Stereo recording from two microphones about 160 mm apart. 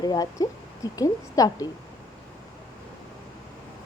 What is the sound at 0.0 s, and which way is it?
Speech, 25° left (ahead or behind).